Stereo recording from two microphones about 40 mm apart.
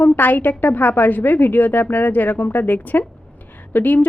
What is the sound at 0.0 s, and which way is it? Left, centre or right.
A woman's voice, left.